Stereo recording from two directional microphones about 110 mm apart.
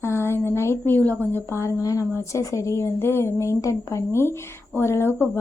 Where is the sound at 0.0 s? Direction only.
25° left (ahead or behind).